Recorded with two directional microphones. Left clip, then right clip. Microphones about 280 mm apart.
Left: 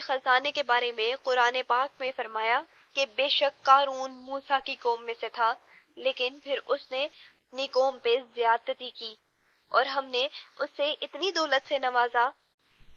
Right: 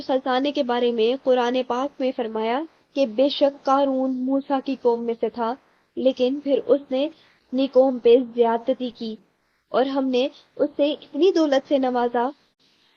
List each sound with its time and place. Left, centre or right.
0.0 s speech: left